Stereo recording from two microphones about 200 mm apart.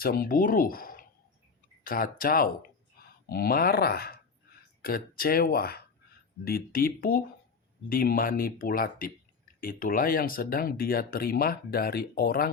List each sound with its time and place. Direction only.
0.0 s speech: 45° left (ahead or behind)